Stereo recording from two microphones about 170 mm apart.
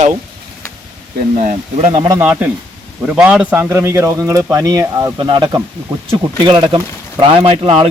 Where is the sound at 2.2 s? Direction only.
10° right (ahead or behind).